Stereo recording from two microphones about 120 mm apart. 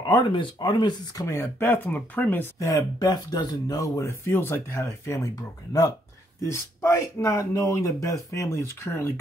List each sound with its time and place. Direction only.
0.0 s speech: 40° left (ahead or behind); by 2.4 s 15° left (ahead or behind)
2.6 s speech: 30° left (ahead or behind)